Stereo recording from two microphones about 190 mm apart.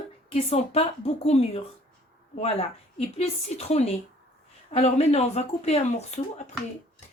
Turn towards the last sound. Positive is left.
turn(degrees=35)  # may be behind; listen again after turning